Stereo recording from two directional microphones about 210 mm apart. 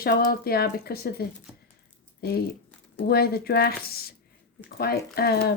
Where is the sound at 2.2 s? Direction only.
50° left (ahead or behind).